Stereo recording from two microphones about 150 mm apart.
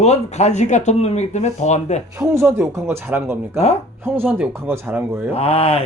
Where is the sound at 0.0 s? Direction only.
45° left (ahead or behind).